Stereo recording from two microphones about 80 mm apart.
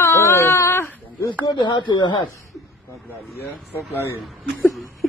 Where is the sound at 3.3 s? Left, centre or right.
Left.